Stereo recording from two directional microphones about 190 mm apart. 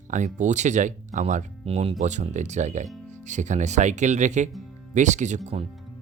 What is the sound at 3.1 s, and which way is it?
Speech, 40° right (ahead or behind).